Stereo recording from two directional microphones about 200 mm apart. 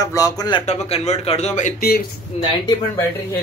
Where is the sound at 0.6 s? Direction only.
35° left (ahead or behind); by 2.0 s 50° left (ahead or behind).